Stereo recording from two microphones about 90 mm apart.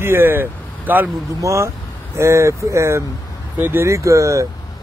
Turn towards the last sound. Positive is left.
turn(degrees=-35)  # may be behind; listen again after turning